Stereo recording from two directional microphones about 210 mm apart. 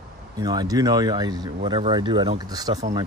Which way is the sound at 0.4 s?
20° right (ahead or behind).